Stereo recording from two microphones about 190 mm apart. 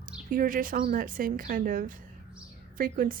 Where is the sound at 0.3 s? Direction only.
45° right (ahead or behind).